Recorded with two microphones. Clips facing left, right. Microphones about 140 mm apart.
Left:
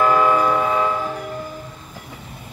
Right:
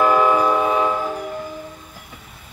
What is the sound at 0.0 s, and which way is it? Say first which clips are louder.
Train: right 1 dB; 10° right (ahead or behind).